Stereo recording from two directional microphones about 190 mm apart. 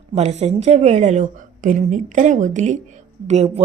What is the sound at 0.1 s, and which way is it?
A woman's voice, 35° right (ahead or behind).